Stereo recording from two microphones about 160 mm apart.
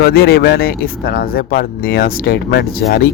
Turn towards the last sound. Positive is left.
turn(degrees=85)